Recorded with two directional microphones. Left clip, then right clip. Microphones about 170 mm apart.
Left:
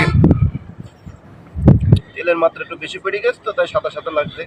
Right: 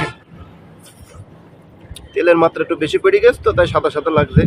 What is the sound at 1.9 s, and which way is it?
Speech, 90° right.